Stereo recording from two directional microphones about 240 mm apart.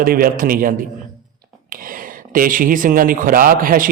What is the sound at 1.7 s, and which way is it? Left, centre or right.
Speech, right.